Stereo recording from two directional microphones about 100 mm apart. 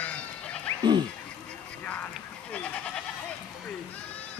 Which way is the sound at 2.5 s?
10° left (ahead or behind).